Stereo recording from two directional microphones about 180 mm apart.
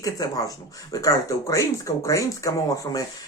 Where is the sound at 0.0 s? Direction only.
20° left (ahead or behind).